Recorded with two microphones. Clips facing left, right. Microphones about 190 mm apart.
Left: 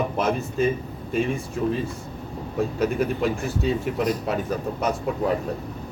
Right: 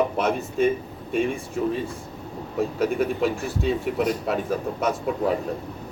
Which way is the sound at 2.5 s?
Centre (ahead or behind).